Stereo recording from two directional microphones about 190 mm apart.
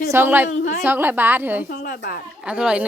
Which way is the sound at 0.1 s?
10° right (ahead or behind).